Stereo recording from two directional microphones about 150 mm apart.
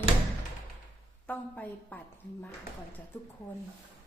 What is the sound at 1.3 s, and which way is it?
Speech, 10° left (ahead or behind).